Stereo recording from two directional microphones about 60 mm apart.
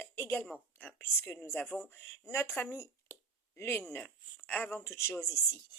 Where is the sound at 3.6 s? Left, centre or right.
Left.